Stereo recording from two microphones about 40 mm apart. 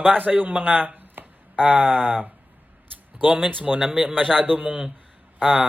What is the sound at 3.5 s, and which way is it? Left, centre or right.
Speech, right.